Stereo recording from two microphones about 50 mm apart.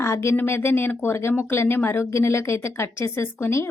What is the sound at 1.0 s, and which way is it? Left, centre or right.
Speech, left.